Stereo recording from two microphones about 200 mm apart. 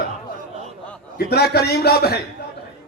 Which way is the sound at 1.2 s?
55° left (ahead or behind).